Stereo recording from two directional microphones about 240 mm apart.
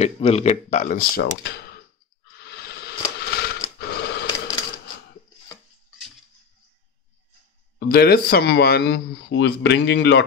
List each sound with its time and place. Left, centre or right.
0.0 s speech: left
2.4 s a sound: left
7.9 s speech: left